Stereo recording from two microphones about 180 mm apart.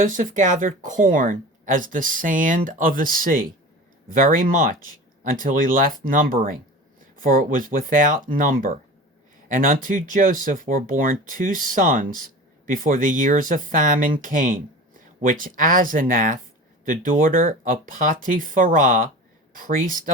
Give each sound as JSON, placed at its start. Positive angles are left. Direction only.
{"t": 0.0, "sound": "speech", "side_deg": -45}